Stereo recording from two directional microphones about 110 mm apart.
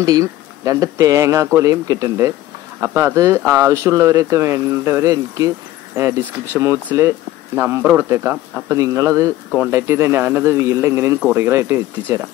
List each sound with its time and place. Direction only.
0.0 s speech: 30° right (ahead or behind)